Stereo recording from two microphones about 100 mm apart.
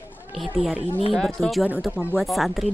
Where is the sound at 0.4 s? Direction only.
Centre (ahead or behind).